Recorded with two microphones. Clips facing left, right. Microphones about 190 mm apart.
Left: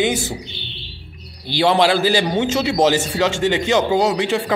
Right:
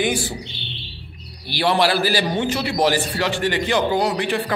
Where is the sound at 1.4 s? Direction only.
20° left (ahead or behind).